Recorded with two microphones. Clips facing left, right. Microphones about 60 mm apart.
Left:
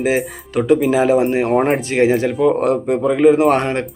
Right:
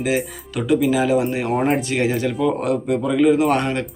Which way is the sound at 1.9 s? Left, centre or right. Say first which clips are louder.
Left 5 dB; left.